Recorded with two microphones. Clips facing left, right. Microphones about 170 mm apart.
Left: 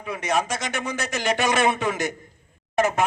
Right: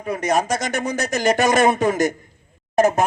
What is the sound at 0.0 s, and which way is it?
Speech, 40° right (ahead or behind).